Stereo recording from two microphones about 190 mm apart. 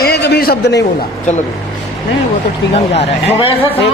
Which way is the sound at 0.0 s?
60° left (ahead or behind).